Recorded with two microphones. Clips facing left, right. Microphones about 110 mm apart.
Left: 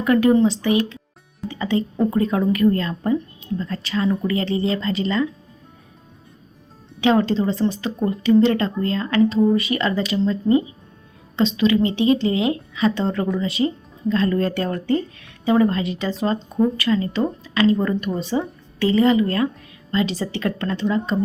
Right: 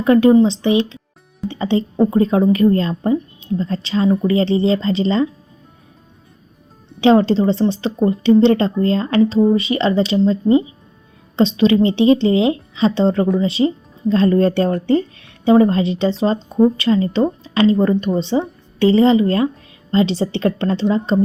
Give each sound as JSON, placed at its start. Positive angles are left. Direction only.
{"t": 0.0, "sound": "speech", "side_deg": -25}
{"t": 7.0, "sound": "speech", "side_deg": -30}